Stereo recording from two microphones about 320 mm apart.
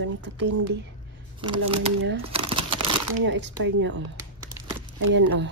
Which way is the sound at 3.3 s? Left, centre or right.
Right.